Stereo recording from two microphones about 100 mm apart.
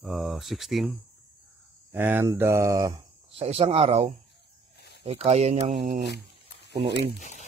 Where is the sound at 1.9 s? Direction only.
20° right (ahead or behind).